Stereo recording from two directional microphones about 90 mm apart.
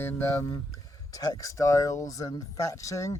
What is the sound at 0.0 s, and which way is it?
Speech, 25° left (ahead or behind).